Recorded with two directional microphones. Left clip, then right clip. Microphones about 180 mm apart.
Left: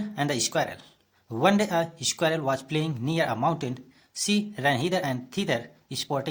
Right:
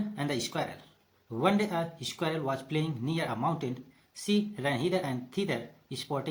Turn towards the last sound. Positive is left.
turn(degrees=45)  # may be behind; listen again after turning